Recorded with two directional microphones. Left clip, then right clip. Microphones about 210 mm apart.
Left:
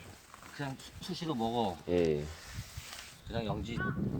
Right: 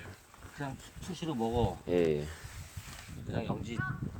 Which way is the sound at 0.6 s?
5° right (ahead or behind).